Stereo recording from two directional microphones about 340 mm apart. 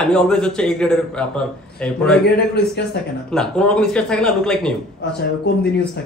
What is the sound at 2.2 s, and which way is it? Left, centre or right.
Speech, left.